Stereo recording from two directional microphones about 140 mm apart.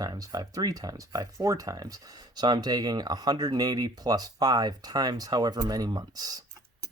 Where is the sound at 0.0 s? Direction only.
25° right (ahead or behind).